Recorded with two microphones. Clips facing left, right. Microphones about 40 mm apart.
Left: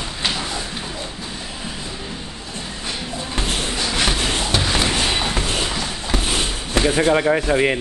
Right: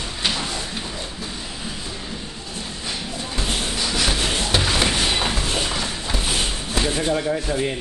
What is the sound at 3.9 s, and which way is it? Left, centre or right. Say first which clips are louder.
Shuffle: left 2 dB; left.